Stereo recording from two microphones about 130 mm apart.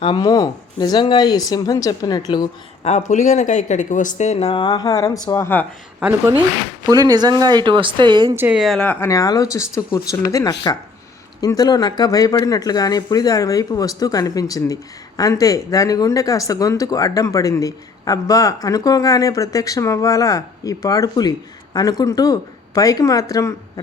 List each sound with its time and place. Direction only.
0.0 s speech: 40° left (ahead or behind)
0.3 s speech: 30° left (ahead or behind)
2.8 s speech: 65° left (ahead or behind); by 5.5 s 30° left (ahead or behind)
6.0 s a woman's voice: 15° right (ahead or behind)
6.9 s speech: 30° right (ahead or behind)
8.5 s speech: centre (ahead or behind)
8.9 s speech: 20° left (ahead or behind)